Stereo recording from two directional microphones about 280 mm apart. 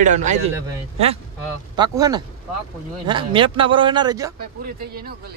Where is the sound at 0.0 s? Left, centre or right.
Right.